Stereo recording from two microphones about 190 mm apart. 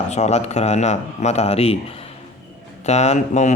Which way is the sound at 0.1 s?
35° left (ahead or behind).